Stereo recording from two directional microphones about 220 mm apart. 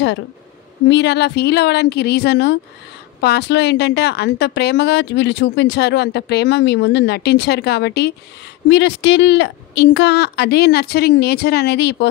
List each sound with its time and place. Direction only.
0.8 s a woman's voice: 50° left (ahead or behind)